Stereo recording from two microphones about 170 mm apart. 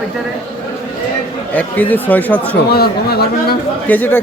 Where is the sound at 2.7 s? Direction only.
65° left (ahead or behind).